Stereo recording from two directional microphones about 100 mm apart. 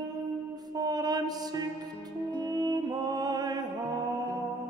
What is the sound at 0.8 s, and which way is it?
Music, 40° right (ahead or behind).